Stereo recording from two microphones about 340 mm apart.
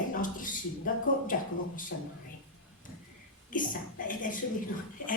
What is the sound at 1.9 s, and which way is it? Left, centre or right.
Speech, left.